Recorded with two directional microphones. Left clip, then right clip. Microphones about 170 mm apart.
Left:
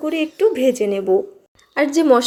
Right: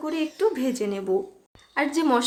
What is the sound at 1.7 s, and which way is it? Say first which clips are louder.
Speech: left 8 dB; 25° left (ahead or behind).